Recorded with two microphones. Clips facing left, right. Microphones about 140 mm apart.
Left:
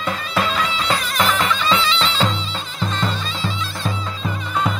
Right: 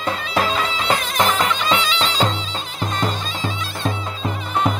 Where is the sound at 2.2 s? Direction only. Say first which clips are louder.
Right 1 dB; 45° right (ahead or behind).